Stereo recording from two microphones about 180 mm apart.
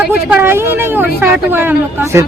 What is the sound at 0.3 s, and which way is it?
Speech, 10° right (ahead or behind).